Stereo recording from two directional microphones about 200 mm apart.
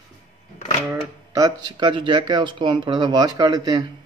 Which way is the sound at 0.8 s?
15° right (ahead or behind).